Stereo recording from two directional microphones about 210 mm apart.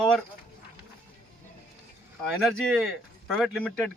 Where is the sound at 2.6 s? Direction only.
5° left (ahead or behind).